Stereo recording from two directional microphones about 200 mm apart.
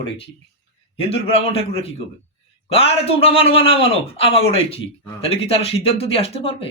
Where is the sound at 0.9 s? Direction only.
30° left (ahead or behind).